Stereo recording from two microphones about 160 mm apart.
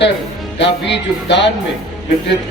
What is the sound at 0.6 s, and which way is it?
Speech, 90° left.